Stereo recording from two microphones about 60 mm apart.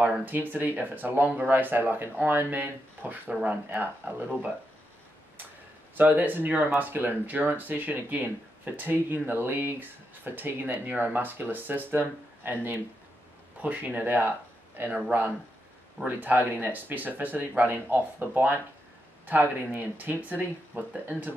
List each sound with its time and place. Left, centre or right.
0.2 s speech: right
5.9 s speech: right
14.9 s speech: centre
16.1 s speech: right